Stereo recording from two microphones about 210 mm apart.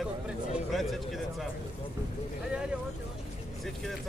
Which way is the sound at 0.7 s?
Centre (ahead or behind).